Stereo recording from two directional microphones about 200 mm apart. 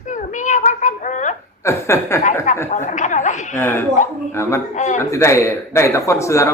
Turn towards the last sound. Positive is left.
turn(degrees=15)  # may be behind; listen again after turning